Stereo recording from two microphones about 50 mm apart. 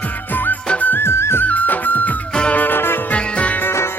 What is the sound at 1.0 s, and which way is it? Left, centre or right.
Music, left.